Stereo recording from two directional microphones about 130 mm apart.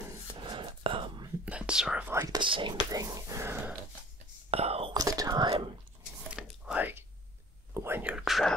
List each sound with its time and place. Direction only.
0.4 s whispering: 40° right (ahead or behind)
1.4 s speech: 10° right (ahead or behind)
2.2 s speech: 35° right (ahead or behind)
2.9 s speech: 25° right (ahead or behind)
4.5 s whispering: 50° right (ahead or behind)
4.9 s whispering: 30° right (ahead or behind)
6.4 s whispering: 5° right (ahead or behind)